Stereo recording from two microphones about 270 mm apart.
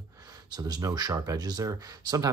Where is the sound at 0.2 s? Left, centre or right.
Centre.